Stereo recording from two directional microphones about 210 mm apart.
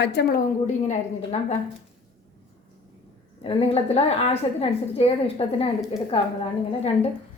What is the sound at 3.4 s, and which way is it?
A woman's voice, 30° left (ahead or behind).